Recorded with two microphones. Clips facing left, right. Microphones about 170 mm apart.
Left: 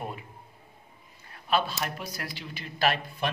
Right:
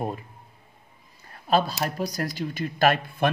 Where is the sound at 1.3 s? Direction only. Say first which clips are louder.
Right 5 dB; 40° right (ahead or behind).